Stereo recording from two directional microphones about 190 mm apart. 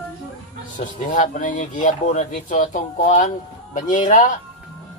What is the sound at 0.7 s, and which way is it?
Speech, 40° left (ahead or behind).